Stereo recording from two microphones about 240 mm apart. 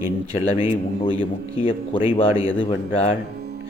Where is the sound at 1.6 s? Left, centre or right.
Left.